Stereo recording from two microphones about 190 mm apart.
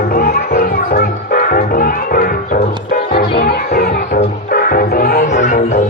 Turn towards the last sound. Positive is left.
turn(degrees=40)  # may be behind; listen again after turning